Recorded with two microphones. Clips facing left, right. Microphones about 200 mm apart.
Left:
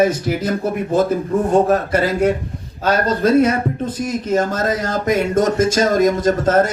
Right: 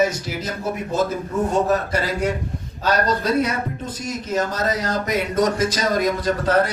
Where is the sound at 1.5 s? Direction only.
50° left (ahead or behind).